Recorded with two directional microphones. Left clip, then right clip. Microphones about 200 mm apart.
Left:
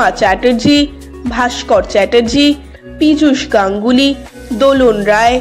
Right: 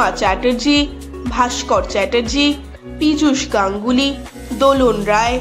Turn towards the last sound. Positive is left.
turn(degrees=20)  # may be behind; listen again after turning